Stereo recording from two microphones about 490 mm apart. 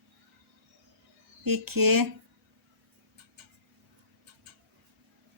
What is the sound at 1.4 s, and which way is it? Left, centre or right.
Speech, right.